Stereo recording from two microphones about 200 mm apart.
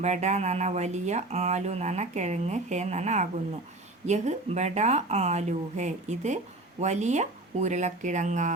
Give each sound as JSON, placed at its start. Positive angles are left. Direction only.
{"t": 0.0, "sound": "speech", "side_deg": -35}